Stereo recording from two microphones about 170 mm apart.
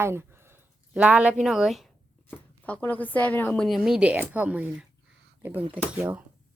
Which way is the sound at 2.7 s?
10° left (ahead or behind).